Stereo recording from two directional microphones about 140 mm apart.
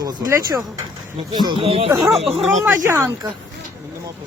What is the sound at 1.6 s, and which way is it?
Speech, 45° right (ahead or behind).